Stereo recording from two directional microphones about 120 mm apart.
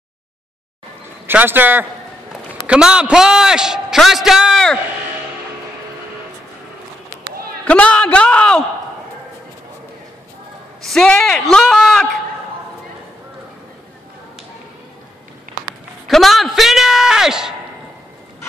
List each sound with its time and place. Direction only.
1.2 s a man's voice: 15° right (ahead or behind); by 4.7 s centre (ahead or behind)
7.6 s a man's voice: 10° left (ahead or behind)
10.8 s a man's voice: 5° left (ahead or behind)
16.1 s a man's voice: centre (ahead or behind)